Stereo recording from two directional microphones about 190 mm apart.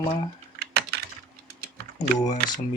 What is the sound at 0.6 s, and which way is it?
Typing, 60° right (ahead or behind).